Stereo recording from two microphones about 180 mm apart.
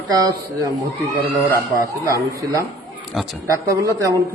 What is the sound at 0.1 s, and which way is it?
Speech, 20° right (ahead or behind).